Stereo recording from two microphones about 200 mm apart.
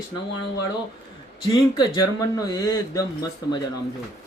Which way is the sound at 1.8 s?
15° left (ahead or behind).